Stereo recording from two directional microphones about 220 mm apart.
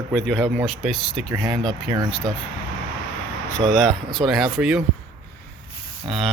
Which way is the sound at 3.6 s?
Centre (ahead or behind).